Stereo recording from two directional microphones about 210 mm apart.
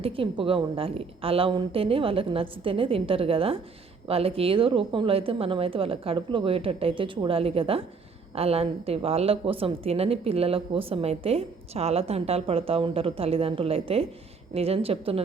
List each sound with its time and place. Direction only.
0.0 s a woman's voice: 25° right (ahead or behind)